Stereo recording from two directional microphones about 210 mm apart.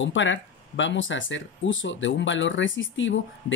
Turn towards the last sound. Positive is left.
turn(degrees=60)  # may be behind; listen again after turning